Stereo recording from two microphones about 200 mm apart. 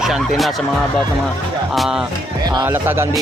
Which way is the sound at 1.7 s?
Centre (ahead or behind).